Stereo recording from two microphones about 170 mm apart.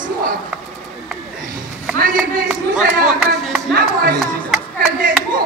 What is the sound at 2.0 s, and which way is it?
Speech, 60° right (ahead or behind).